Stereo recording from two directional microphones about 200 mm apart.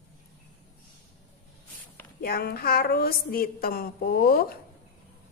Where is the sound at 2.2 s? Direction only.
50° left (ahead or behind).